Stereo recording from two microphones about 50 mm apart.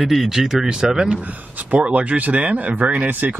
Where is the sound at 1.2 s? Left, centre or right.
Right.